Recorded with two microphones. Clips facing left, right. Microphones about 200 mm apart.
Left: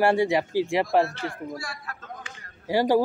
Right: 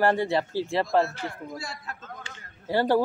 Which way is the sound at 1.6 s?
25° right (ahead or behind).